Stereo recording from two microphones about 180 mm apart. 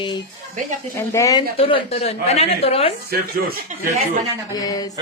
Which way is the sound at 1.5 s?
35° left (ahead or behind).